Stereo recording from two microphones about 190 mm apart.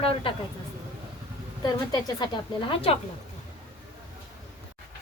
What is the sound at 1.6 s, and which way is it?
A woman's voice, 20° left (ahead or behind).